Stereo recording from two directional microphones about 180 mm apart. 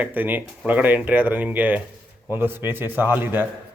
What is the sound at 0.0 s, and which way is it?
Speech, 10° right (ahead or behind).